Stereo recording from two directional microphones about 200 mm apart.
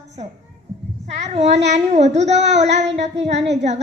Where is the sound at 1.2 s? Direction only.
35° right (ahead or behind).